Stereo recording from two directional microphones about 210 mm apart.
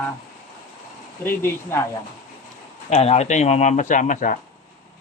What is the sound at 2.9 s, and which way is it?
A man's voice, 30° left (ahead or behind).